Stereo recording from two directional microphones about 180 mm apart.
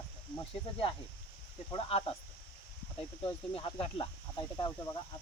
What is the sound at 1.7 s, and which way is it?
Speech, 30° left (ahead or behind).